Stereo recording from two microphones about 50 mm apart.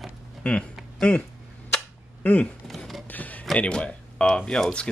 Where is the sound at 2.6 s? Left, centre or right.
Centre.